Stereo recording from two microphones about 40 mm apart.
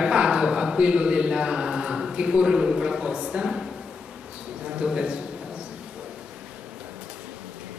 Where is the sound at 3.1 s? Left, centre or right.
Right.